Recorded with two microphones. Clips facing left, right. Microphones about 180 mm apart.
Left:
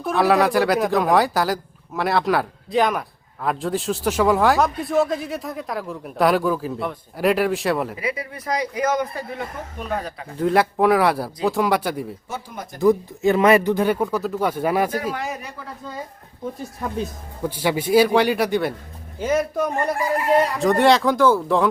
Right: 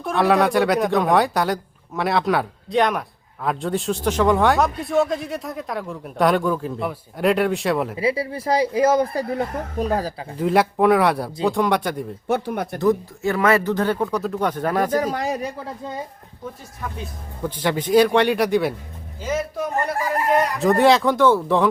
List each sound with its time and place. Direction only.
0.0 s a man's voice: centre (ahead or behind)
7.9 s speech: 30° right (ahead or behind)
10.3 s a man's voice: centre (ahead or behind)
12.3 s speech: 65° right (ahead or behind)
12.8 s speech: 15° left (ahead or behind)
14.9 s a man's voice: 40° right (ahead or behind)
17.4 s speech: 10° left (ahead or behind)
19.2 s speech: 55° left (ahead or behind)
20.6 s a man's voice: centre (ahead or behind)